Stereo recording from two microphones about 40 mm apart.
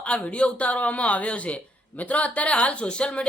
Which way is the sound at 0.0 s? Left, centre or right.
Left.